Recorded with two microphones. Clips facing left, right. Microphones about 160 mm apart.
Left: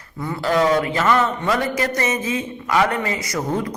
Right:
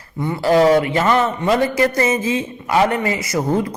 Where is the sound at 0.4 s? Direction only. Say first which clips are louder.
Right 5 dB; 30° right (ahead or behind).